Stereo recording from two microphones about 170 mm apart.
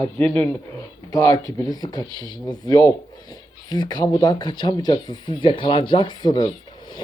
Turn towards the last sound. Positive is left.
turn(degrees=25)  # may be behind; listen again after turning